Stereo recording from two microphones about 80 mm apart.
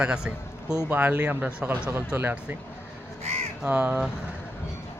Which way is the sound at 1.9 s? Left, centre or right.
Right.